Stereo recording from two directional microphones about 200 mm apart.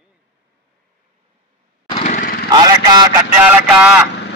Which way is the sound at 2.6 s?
20° right (ahead or behind).